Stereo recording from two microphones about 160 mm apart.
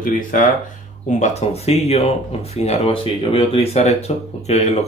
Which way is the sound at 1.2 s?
45° left (ahead or behind).